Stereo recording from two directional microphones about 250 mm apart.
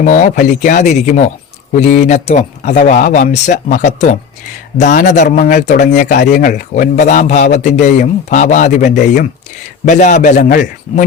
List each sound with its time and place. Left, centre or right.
0.0 s speech: left